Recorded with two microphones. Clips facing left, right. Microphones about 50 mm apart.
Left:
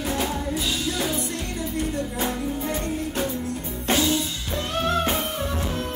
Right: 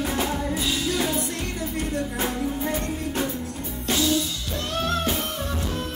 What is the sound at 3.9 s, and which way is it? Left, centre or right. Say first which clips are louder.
Music: left 1 dB; left.